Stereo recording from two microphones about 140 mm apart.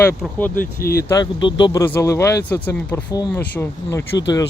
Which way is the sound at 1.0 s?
20° left (ahead or behind).